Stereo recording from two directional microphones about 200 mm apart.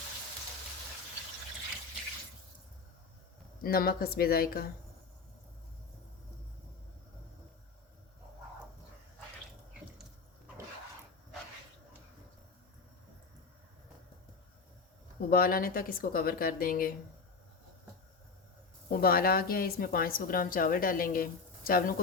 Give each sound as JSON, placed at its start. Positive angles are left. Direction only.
{"t": 3.6, "sound": "a woman's voice", "side_deg": 50}
{"t": 15.3, "sound": "a woman's voice", "side_deg": 45}
{"t": 18.9, "sound": "a woman's voice", "side_deg": 50}